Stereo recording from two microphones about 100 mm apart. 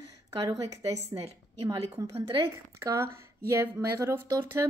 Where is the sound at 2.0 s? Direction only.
30° right (ahead or behind).